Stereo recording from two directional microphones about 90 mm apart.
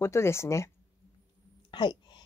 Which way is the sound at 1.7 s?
55° left (ahead or behind).